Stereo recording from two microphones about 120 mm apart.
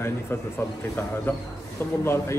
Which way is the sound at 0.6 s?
20° left (ahead or behind).